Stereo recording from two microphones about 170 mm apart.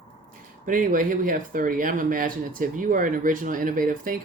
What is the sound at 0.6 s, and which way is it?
Speech, 55° right (ahead or behind).